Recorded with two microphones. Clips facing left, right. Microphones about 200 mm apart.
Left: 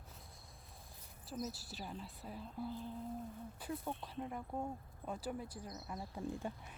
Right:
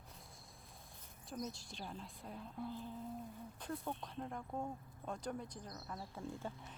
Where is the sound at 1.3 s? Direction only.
5° left (ahead or behind).